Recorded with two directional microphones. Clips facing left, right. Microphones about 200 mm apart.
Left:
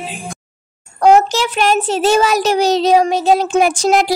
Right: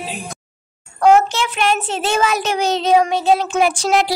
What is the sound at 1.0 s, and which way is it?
Child singing, 40° left (ahead or behind).